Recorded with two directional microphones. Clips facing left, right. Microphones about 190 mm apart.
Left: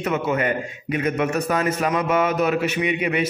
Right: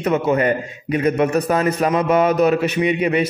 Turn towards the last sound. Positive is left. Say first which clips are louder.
# right 4 dB
turn(degrees=-35)  # may be behind; listen again after turning